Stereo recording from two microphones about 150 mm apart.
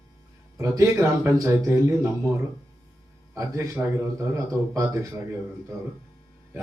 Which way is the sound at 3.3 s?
20° right (ahead or behind).